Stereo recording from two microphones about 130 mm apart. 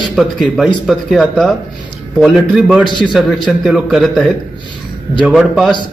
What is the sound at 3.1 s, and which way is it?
Speech, centre (ahead or behind).